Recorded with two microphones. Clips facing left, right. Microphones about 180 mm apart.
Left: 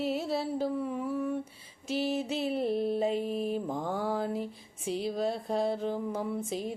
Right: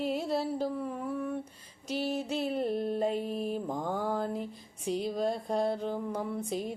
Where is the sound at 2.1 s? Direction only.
5° left (ahead or behind).